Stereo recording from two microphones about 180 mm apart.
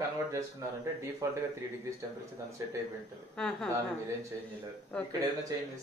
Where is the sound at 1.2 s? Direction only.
20° right (ahead or behind).